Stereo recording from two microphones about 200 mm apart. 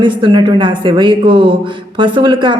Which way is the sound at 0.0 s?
25° right (ahead or behind).